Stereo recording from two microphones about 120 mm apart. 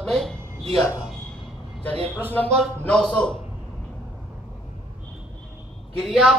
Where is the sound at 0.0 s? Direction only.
5° left (ahead or behind).